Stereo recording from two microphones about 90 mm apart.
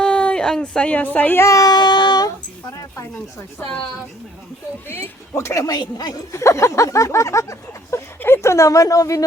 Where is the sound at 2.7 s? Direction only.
35° left (ahead or behind).